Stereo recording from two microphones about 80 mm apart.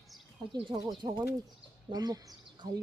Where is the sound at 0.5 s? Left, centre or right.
Right.